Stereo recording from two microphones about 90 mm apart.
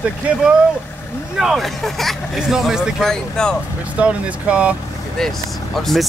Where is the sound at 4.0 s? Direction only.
10° right (ahead or behind).